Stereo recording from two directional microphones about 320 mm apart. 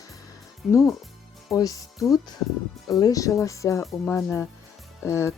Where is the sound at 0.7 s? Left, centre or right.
Centre.